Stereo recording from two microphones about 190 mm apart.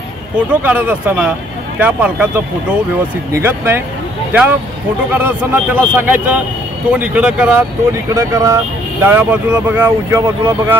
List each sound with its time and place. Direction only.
0.5 s speech: 10° right (ahead or behind)
8.1 s speech: 15° right (ahead or behind)